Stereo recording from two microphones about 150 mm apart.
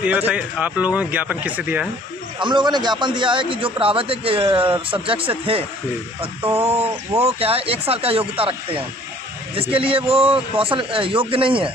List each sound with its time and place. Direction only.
0.0 s speech: 10° right (ahead or behind)
2.4 s a man's voice: 30° right (ahead or behind)
6.4 s speech: 20° right (ahead or behind)
7.2 s a man's voice: 40° right (ahead or behind)